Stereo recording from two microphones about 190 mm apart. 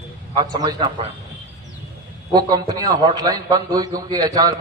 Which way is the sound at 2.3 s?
20° right (ahead or behind).